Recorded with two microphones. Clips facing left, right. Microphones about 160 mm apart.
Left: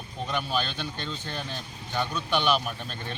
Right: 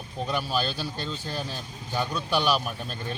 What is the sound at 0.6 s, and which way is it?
Speech, 35° right (ahead or behind).